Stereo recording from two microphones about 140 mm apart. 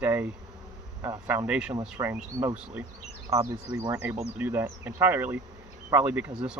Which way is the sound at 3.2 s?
25° right (ahead or behind).